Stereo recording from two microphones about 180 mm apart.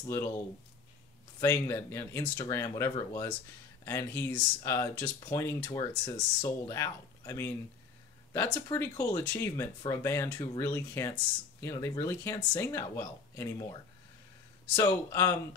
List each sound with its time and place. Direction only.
1.4 s speech: 15° left (ahead or behind)
14.8 s speech: 15° left (ahead or behind)